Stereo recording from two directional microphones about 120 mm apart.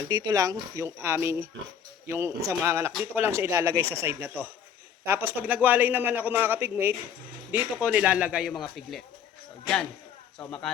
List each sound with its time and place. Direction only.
0.1 s a man's voice: 35° right (ahead or behind); by 9.0 s centre (ahead or behind)